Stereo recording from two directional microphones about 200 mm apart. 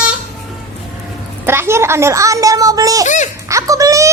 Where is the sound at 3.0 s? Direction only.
40° left (ahead or behind).